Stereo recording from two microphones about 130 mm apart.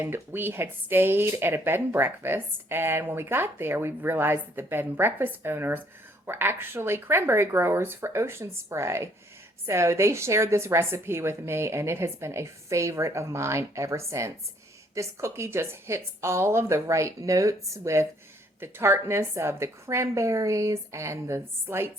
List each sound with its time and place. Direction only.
0.0 s a woman's voice: 15° right (ahead or behind)